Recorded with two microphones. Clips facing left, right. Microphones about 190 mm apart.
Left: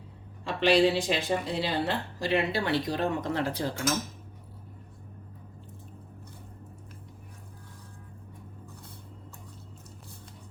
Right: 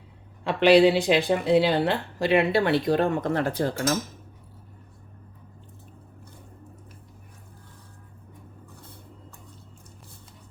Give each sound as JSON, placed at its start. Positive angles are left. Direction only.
{"t": 0.4, "sound": "speech", "side_deg": -65}